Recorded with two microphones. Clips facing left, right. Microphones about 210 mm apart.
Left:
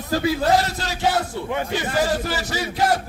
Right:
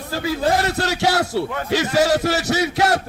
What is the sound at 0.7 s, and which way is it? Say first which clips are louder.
A man's voice: right 3 dB; 70° right (ahead or behind).